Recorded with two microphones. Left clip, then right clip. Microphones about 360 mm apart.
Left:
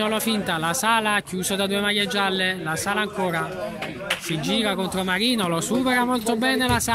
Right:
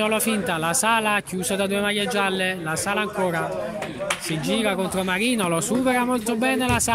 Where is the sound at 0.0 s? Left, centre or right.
Centre.